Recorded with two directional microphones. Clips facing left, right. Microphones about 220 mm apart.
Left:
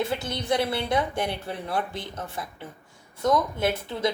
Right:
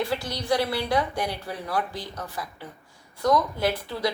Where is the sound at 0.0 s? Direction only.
20° left (ahead or behind).